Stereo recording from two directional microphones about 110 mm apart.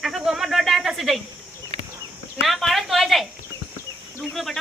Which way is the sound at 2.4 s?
Centre (ahead or behind).